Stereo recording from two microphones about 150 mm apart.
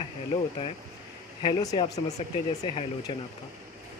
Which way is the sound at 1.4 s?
30° left (ahead or behind).